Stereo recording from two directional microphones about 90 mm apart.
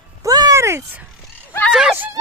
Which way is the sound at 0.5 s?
30° right (ahead or behind).